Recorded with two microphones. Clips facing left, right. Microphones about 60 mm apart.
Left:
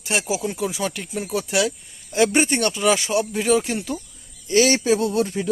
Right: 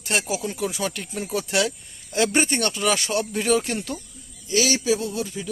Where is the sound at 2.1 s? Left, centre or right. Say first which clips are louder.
Left 3 dB; centre.